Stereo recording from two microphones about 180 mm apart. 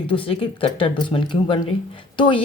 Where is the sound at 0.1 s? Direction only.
30° left (ahead or behind).